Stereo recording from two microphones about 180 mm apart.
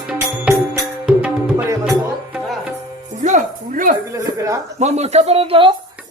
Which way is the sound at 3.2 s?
45° right (ahead or behind).